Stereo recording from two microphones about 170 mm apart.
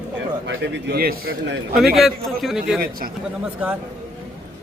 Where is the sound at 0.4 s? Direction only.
90° right; by 1.5 s 65° right (ahead or behind).